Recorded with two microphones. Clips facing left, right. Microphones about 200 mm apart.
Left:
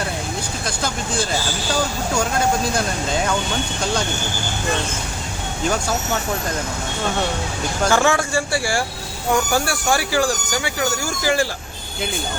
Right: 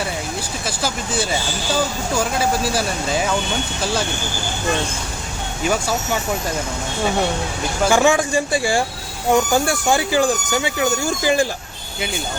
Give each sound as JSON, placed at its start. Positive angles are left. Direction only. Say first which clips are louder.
{"t": 0.8, "sound": "speech", "louder": "right 1 dB", "side_deg": -5}
{"t": 7.9, "sound": "speech", "louder": "right 3 dB", "side_deg": -15}